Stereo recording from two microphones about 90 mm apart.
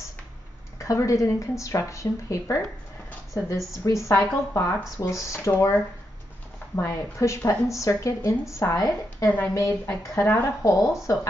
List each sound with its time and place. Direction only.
0.7 s speech: 35° left (ahead or behind)